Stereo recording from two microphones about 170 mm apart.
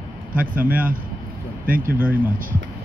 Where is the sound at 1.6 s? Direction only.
55° right (ahead or behind).